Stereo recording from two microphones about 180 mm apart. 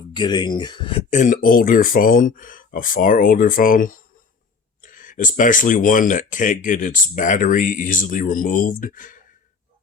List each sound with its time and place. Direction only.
0.1 s speech: 25° left (ahead or behind)
1.1 s speech: 45° left (ahead or behind)